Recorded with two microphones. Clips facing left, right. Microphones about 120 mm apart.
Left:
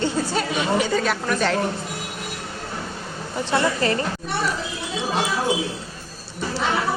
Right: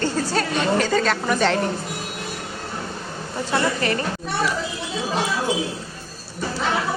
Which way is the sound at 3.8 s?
30° left (ahead or behind).